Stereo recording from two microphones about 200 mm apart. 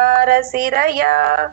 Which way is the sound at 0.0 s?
45° right (ahead or behind).